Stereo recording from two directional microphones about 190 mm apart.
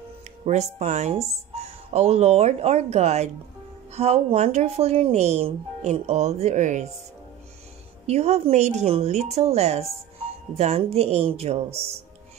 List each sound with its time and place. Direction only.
0.5 s speech: 40° right (ahead or behind)
8.1 s speech: 35° right (ahead or behind)